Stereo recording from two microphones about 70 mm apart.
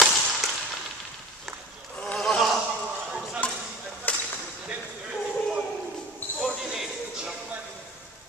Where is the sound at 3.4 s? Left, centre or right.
Left.